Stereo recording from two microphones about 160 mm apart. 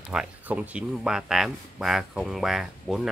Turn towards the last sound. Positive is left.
turn(degrees=0)  # may be behind; listen again after turning